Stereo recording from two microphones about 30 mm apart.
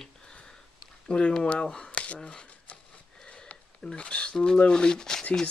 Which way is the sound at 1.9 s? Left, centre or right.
Left.